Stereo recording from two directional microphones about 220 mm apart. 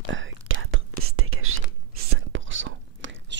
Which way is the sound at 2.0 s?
60° right (ahead or behind).